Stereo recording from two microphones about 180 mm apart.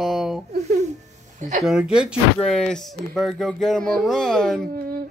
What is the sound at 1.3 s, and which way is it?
Speech, 40° right (ahead or behind).